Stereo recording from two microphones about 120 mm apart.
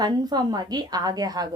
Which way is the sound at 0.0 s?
35° right (ahead or behind).